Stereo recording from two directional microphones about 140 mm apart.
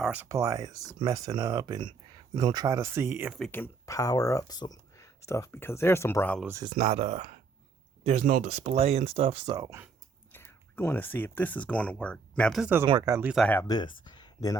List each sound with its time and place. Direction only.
0.0 s speech: 10° right (ahead or behind)
0.3 s speech: 20° right (ahead or behind)
3.5 s speech: 20° left (ahead or behind)
6.7 s speech: 55° right (ahead or behind)
9.6 s speech: 25° right (ahead or behind)
10.3 s speech: 15° left (ahead or behind)
12.8 s speech: 35° right (ahead or behind)
13.2 s speech: centre (ahead or behind)
13.7 s speech: 30° left (ahead or behind)